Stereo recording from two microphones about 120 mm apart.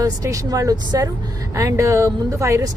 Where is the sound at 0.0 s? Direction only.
30° right (ahead or behind).